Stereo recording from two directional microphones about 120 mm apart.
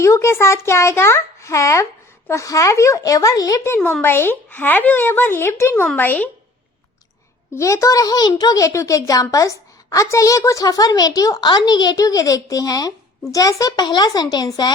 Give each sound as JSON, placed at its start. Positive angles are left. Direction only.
{"t": 0.0, "sound": "a child's voice", "side_deg": 25}
{"t": 7.5, "sound": "a child's voice", "side_deg": 25}